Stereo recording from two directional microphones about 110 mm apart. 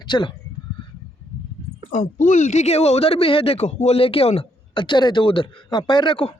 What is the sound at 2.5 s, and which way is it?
Speech, 85° left.